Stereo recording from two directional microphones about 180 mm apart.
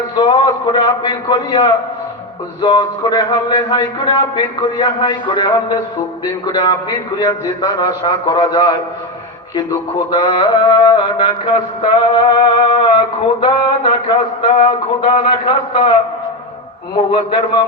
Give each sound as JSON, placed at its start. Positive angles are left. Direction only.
{"t": 0.2, "sound": "a man's voice", "side_deg": 20}
{"t": 10.1, "sound": "a man's voice", "side_deg": 25}
{"t": 13.4, "sound": "mantra", "side_deg": 25}
{"t": 14.6, "sound": "a man's voice", "side_deg": 25}